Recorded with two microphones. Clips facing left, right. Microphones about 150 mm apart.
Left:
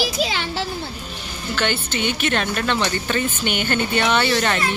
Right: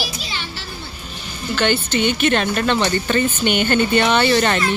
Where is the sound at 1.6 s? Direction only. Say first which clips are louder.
Right 5 dB; 5° left (ahead or behind).